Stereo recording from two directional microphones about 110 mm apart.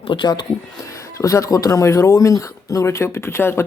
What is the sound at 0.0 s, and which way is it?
Speech, 45° left (ahead or behind).